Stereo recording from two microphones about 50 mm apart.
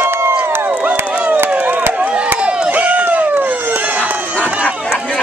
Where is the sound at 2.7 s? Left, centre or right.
Right.